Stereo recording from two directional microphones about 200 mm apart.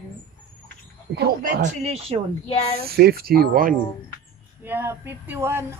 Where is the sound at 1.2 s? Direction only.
45° right (ahead or behind).